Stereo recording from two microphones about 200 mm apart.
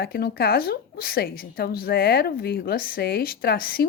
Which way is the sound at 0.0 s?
50° left (ahead or behind).